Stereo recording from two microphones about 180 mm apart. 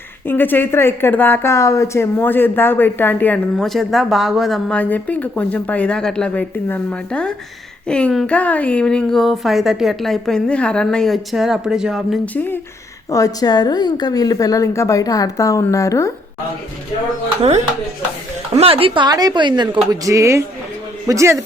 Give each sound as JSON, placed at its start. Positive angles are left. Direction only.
{"t": 0.3, "sound": "a woman's voice", "side_deg": 10}
{"t": 18.5, "sound": "a man's voice", "side_deg": -30}